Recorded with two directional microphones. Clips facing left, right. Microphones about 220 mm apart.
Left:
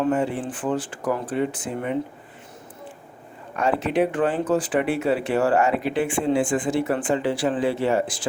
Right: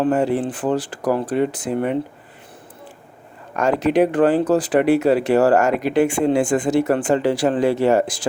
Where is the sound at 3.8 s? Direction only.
40° right (ahead or behind).